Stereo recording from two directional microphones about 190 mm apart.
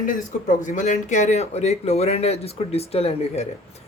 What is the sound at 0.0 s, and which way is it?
Speech, 45° left (ahead or behind).